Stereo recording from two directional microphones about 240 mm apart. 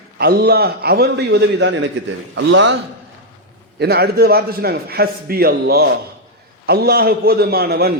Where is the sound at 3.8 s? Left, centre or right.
Right.